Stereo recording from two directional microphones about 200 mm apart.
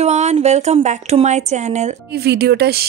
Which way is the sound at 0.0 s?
35° right (ahead or behind).